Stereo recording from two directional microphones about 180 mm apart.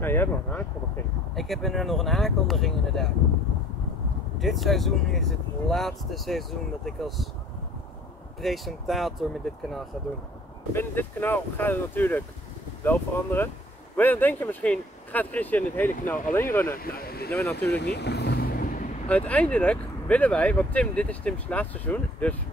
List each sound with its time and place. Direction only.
0.0 s speech: 10° left (ahead or behind)
4.4 s speech: centre (ahead or behind)
8.4 s speech: centre (ahead or behind)
10.7 s speech: 10° left (ahead or behind)
16.7 s speech: 55° left (ahead or behind)
17.3 s speech: 15° left (ahead or behind)
17.6 s vehicle: 65° left (ahead or behind); by 18.9 s 50° left (ahead or behind)
19.0 s speech: 5° left (ahead or behind)